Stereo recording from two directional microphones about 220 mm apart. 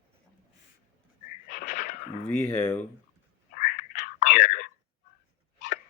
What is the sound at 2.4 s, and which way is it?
Speech, 10° left (ahead or behind).